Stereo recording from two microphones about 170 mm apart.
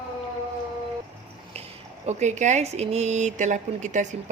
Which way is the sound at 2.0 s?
45° right (ahead or behind).